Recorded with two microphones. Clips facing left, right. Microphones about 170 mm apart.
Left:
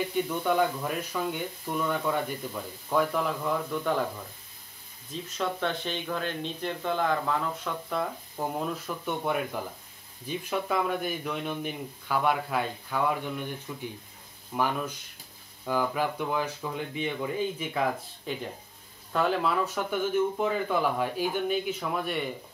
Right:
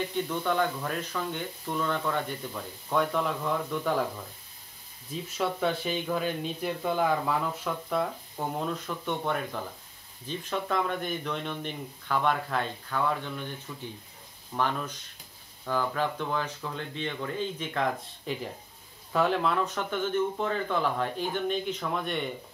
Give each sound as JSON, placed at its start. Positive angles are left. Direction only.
{"t": 0.1, "sound": "speech", "side_deg": 10}
{"t": 5.1, "sound": "speech", "side_deg": -5}